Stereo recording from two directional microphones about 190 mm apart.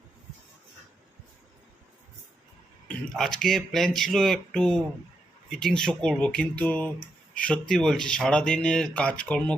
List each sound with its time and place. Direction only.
2.8 s speech: 5° left (ahead or behind)